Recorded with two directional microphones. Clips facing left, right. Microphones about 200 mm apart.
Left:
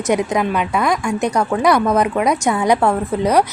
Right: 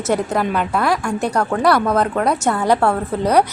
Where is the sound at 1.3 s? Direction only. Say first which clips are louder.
Even; 10° left (ahead or behind).